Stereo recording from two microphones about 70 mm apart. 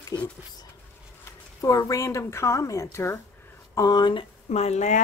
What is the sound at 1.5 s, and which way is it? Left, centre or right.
Speech, left.